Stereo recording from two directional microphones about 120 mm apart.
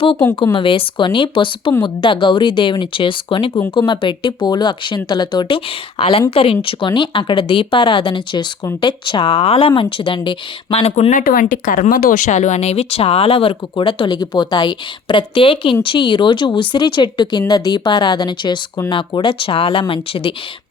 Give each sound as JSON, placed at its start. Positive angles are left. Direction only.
{"t": 0.5, "sound": "speech", "side_deg": 45}